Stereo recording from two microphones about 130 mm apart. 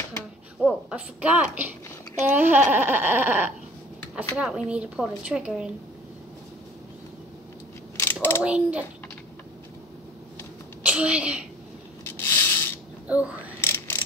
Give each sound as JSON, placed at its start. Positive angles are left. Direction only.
{"t": 0.6, "sound": "speech", "side_deg": -10}
{"t": 8.0, "sound": "mechanisms", "side_deg": 15}
{"t": 8.4, "sound": "speech", "side_deg": -10}
{"t": 10.8, "sound": "speech", "side_deg": -10}
{"t": 12.0, "sound": "rub", "side_deg": 20}
{"t": 13.1, "sound": "speech", "side_deg": -10}
{"t": 13.6, "sound": "mechanisms", "side_deg": 20}